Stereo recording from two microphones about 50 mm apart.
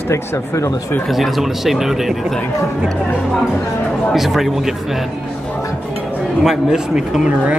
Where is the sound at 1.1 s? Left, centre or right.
Centre.